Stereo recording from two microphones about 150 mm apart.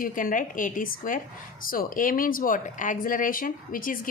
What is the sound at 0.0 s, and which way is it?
A woman's voice, 65° left (ahead or behind).